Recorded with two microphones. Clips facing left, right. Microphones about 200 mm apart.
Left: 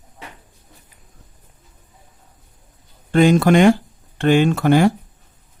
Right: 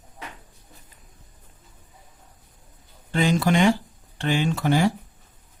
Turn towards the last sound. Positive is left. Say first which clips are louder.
# left 7 dB
turn(degrees=55)  # may be behind; listen again after turning